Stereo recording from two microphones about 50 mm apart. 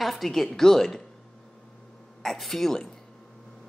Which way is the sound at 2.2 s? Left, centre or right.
Centre.